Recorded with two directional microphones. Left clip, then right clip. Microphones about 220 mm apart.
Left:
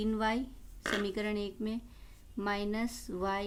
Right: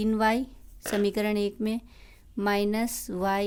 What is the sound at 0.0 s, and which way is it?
A woman's voice, 40° right (ahead or behind).